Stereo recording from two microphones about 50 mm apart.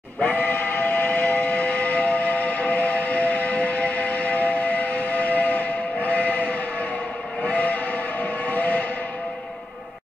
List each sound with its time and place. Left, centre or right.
0.3 s steam whistle: left
7.5 s train: left